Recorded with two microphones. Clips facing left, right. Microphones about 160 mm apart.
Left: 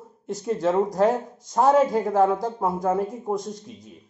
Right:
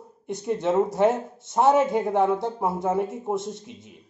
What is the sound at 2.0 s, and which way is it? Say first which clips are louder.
Speech: left 2 dB; 20° right (ahead or behind).